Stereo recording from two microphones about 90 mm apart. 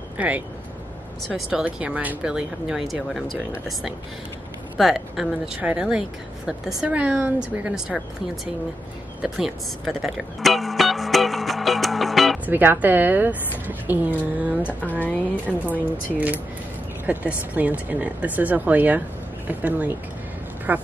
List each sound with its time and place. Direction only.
0.2 s speech: 15° right (ahead or behind)
4.7 s speech: 5° right (ahead or behind)
9.2 s music: 5° right (ahead or behind)
12.4 s speech: 20° right (ahead or behind)
14.9 s speech: 15° left (ahead or behind)
17.0 s speech: 20° right (ahead or behind)